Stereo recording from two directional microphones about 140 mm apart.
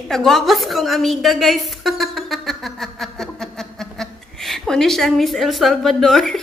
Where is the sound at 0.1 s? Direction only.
Centre (ahead or behind).